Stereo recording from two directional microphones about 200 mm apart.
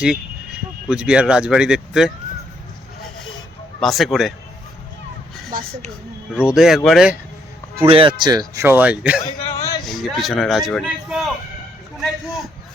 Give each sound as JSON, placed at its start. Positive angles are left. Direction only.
{"t": 0.9, "sound": "speech", "side_deg": -5}
{"t": 3.8, "sound": "speech", "side_deg": 0}
{"t": 5.5, "sound": "speech", "side_deg": -45}
{"t": 6.3, "sound": "speech", "side_deg": -5}
{"t": 7.8, "sound": "speech", "side_deg": -25}
{"t": 9.2, "sound": "speech", "side_deg": 30}
{"t": 9.6, "sound": "a sound", "side_deg": 20}
{"t": 9.8, "sound": "speech", "side_deg": 0}
{"t": 11.9, "sound": "a sound", "side_deg": 0}